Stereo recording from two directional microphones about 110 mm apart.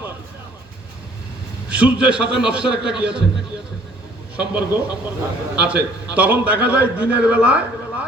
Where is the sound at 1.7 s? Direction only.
10° right (ahead or behind).